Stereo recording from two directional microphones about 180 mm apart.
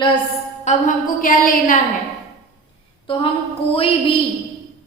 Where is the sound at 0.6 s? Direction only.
45° left (ahead or behind).